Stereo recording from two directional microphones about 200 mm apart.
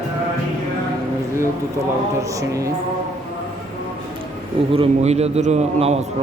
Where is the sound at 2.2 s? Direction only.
15° right (ahead or behind).